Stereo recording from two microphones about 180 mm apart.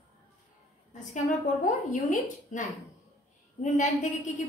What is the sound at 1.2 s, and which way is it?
A woman's voice, 45° left (ahead or behind).